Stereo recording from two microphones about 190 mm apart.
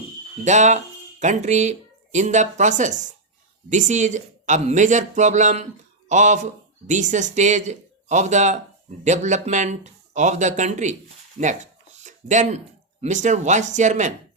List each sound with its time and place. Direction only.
0.4 s a man's voice: 40° right (ahead or behind)
11.3 s a sound: 40° right (ahead or behind)
13.0 s speech: 40° right (ahead or behind)